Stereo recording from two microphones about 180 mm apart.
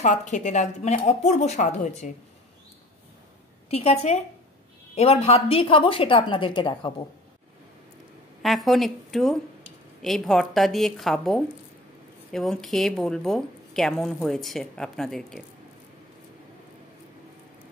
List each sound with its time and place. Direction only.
0.0 s a woman's voice: 40° left (ahead or behind)
3.7 s a woman's voice: 35° left (ahead or behind)
8.4 s a woman's voice: centre (ahead or behind)